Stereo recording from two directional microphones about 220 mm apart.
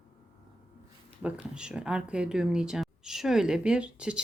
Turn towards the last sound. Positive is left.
turn(degrees=-5)  # may be behind; listen again after turning